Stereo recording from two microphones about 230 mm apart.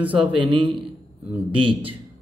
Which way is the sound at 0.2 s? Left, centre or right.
Right.